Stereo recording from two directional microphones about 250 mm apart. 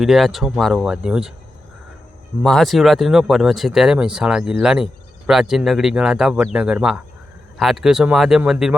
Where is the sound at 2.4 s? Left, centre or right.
Centre.